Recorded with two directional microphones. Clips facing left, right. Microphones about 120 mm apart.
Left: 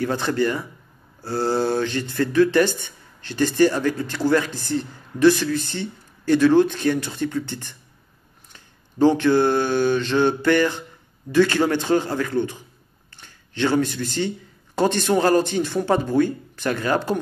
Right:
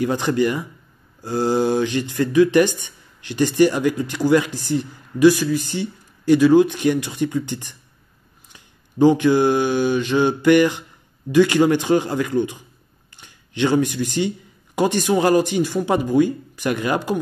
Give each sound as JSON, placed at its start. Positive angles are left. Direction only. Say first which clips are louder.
{"t": 0.0, "sound": "speech", "louder": "right 2 dB", "side_deg": -15}